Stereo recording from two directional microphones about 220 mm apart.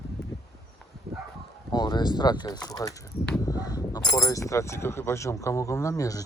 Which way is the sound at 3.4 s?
15° left (ahead or behind).